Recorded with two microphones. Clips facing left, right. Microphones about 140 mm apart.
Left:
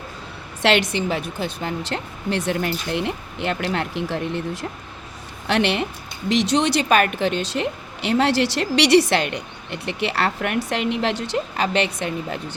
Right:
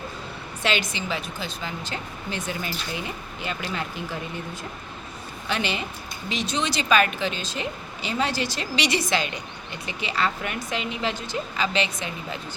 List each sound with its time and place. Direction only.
0.6 s speech: 70° left (ahead or behind)